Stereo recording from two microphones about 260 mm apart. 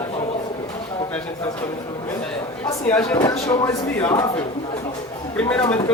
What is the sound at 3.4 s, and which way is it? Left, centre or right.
Speech, left.